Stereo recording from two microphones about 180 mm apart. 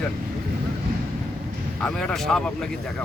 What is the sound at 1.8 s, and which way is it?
Speech, 5° left (ahead or behind).